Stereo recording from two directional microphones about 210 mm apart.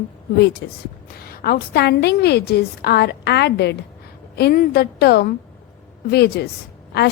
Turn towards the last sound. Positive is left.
turn(degrees=50)  # may be behind; listen again after turning